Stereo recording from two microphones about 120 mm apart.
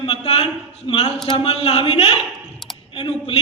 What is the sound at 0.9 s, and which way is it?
A man's voice, 60° left (ahead or behind).